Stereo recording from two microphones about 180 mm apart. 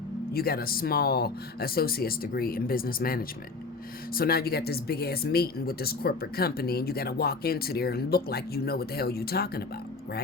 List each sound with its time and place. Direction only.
0.3 s speech: 55° left (ahead or behind)